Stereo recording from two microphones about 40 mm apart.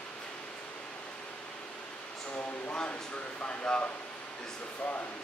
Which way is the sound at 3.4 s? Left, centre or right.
Left.